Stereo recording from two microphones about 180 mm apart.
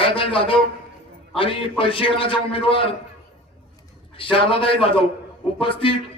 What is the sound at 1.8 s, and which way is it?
A man's voice, 30° left (ahead or behind).